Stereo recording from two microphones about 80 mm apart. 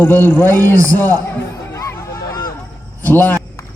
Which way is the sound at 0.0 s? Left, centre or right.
Left.